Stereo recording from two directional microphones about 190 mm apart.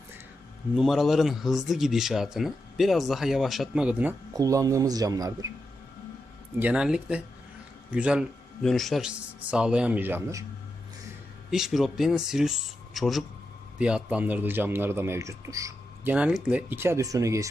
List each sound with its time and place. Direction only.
0.8 s speech: centre (ahead or behind)
4.4 s a man's voice: 15° right (ahead or behind)
6.6 s speech: 5° right (ahead or behind)
11.5 s a man's voice: centre (ahead or behind)
16.1 s a man's voice: 5° right (ahead or behind)